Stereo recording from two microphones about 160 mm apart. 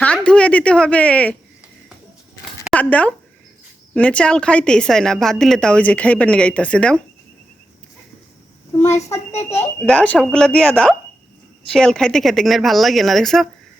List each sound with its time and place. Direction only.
0.0 s a woman's voice: 5° left (ahead or behind)
2.4 s a sound: 5° left (ahead or behind)
3.9 s a woman's voice: 10° left (ahead or behind)
9.3 s speech: 40° left (ahead or behind)
9.8 s speech: 5° left (ahead or behind)